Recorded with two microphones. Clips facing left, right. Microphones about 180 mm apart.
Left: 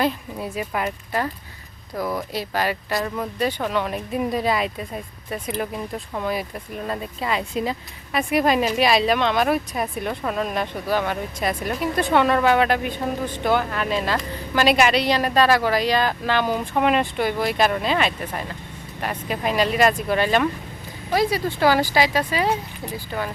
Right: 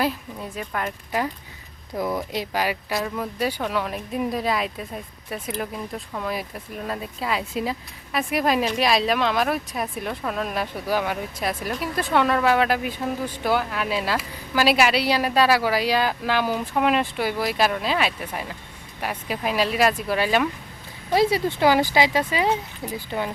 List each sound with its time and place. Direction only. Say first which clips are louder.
0.3 s speech: left 3 dB; 10° left (ahead or behind)
2.0 s speech: even; 20° right (ahead or behind)
2.9 s speech: left 1 dB; centre (ahead or behind)
21.1 s speech: right 1 dB; 25° right (ahead or behind)